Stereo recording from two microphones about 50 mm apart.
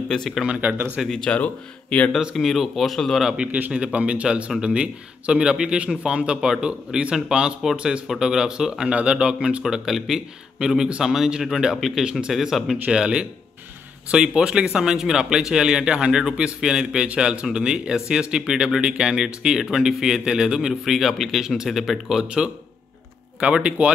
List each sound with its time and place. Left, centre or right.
0.5 s speech: right
1.0 s speech: centre
1.3 s speech: left
2.3 s speech: centre
3.4 s speech: right
9.9 s speech: centre
10.9 s speech: centre
12.3 s speech: centre
12.9 s speech: centre
20.8 s speech: centre
23.4 s speech: right